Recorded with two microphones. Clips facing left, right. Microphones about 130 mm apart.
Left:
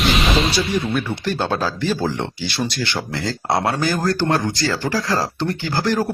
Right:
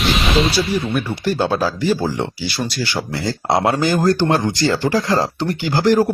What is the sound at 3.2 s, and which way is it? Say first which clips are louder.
Speech: right 3 dB; 20° right (ahead or behind).